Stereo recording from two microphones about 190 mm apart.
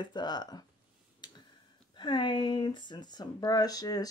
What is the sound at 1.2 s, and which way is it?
Finger snapping, 20° left (ahead or behind).